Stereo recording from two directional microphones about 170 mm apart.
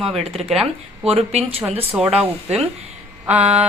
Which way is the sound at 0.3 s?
Centre (ahead or behind).